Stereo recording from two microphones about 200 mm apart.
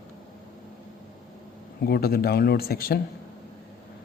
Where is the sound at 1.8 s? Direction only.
50° left (ahead or behind).